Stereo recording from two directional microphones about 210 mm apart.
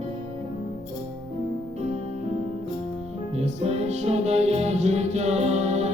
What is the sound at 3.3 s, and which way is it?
Music, 30° right (ahead or behind).